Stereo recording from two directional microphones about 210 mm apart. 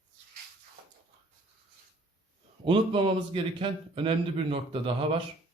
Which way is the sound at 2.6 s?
25° right (ahead or behind).